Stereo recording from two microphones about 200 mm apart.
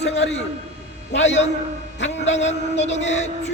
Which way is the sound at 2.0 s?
35° left (ahead or behind).